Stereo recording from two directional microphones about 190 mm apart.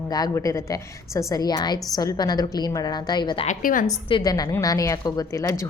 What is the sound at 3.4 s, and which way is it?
Speech, 45° left (ahead or behind).